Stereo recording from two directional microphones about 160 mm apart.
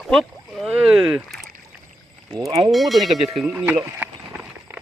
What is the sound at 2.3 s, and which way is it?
Speech, 25° right (ahead or behind).